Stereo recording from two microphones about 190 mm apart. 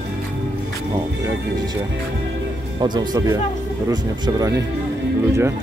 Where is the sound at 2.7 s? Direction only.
20° right (ahead or behind).